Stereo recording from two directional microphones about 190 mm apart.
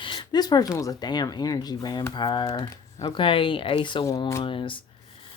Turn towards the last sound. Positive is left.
turn(degrees=25)  # may be behind; listen again after turning